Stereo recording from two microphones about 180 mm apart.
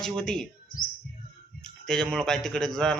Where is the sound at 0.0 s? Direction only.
5° left (ahead or behind).